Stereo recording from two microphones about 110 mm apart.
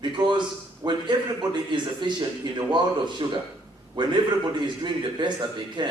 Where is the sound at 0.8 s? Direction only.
40° right (ahead or behind).